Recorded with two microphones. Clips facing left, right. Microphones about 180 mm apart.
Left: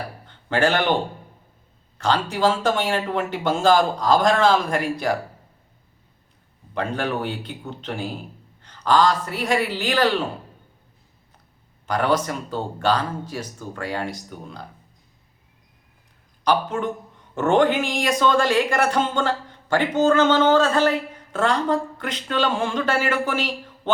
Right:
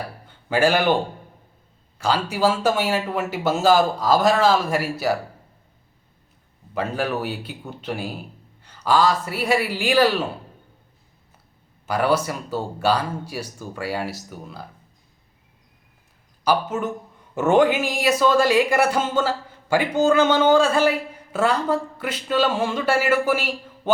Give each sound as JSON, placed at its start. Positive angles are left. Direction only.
{"t": 0.3, "sound": "speech", "side_deg": -10}
{"t": 6.7, "sound": "speech", "side_deg": -5}
{"t": 11.9, "sound": "speech", "side_deg": -10}
{"t": 16.4, "sound": "speech", "side_deg": -5}